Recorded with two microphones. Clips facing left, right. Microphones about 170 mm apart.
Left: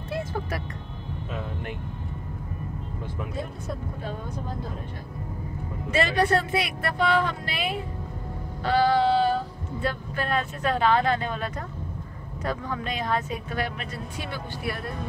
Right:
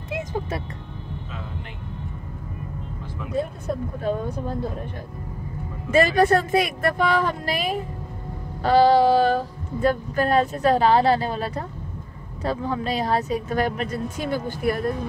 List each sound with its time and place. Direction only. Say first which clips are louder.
0.1 s music: right 2 dB; 15° right (ahead or behind)
5.9 s a woman's voice: right 6 dB; 45° right (ahead or behind)